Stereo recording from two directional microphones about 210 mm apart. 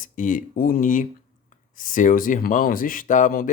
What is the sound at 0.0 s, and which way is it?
Speech, 40° left (ahead or behind).